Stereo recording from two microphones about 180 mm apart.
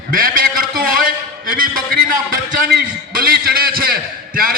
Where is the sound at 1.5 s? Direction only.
50° right (ahead or behind).